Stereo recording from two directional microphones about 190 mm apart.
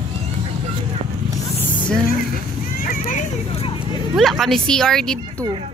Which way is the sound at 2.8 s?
45° left (ahead or behind).